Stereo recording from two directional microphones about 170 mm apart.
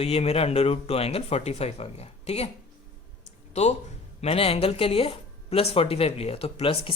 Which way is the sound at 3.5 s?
40° left (ahead or behind).